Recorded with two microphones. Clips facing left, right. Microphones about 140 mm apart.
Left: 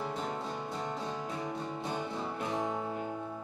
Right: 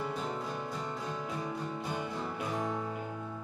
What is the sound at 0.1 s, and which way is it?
Music, 25° left (ahead or behind).